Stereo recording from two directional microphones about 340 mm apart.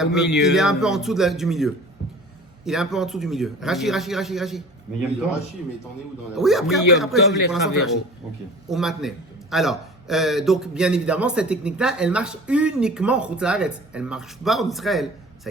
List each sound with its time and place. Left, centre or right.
0.0 s a man's voice: centre
0.3 s speech: left
0.5 s a man's voice: centre
6.3 s a man's voice: centre